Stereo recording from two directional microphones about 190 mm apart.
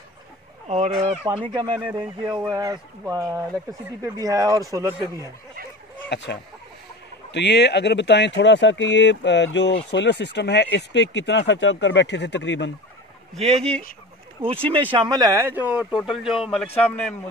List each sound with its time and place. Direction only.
0.7 s speech: 35° right (ahead or behind)
0.9 s speech: 5° right (ahead or behind)
1.4 s speech: 25° right (ahead or behind)
1.8 s speech: 5° right (ahead or behind)
2.3 s speech: 20° right (ahead or behind)
6.0 s speech: 65° left (ahead or behind)
14.4 s a man's voice: 30° right (ahead or behind); by 17.1 s 5° left (ahead or behind)